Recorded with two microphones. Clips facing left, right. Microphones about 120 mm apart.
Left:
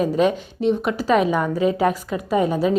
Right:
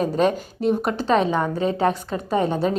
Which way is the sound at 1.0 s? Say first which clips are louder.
Left 2 dB; 30° right (ahead or behind).